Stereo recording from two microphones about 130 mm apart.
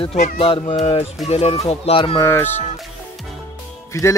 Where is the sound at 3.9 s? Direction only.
20° left (ahead or behind).